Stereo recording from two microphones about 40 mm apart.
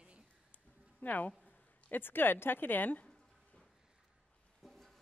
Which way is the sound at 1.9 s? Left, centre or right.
Left.